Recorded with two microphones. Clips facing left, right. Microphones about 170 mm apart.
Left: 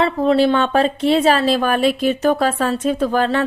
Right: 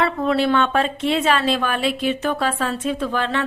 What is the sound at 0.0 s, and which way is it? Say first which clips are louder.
Speech: left 4 dB; 30° left (ahead or behind).